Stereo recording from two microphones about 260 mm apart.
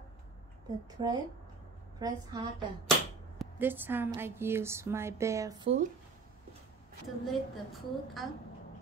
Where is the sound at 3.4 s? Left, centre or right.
Centre.